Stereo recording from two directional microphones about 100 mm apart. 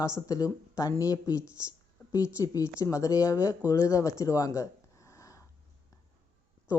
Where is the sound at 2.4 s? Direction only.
35° left (ahead or behind).